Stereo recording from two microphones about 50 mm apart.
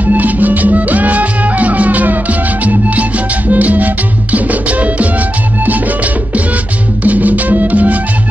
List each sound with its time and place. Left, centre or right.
0.0 s music: right
7.0 s music: right